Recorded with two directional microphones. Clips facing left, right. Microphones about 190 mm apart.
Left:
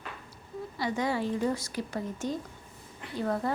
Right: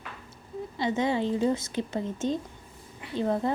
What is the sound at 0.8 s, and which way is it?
A woman's voice, 25° right (ahead or behind).